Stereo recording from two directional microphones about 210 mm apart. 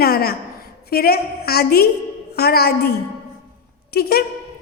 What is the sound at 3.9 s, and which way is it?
Speech, 50° left (ahead or behind).